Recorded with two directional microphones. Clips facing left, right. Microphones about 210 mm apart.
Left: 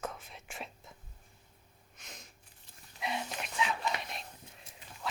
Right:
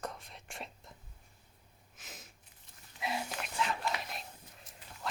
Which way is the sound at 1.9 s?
5° right (ahead or behind).